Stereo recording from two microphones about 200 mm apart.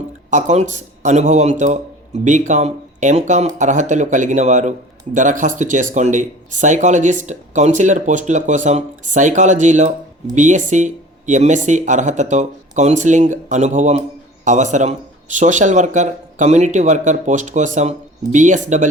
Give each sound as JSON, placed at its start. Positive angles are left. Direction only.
{"t": 0.3, "sound": "speech", "side_deg": -35}